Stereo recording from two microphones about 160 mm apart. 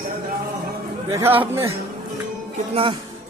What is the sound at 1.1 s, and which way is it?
Speech, 15° right (ahead or behind).